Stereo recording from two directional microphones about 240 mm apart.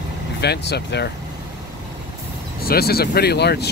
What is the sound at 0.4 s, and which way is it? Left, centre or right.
Speech, left.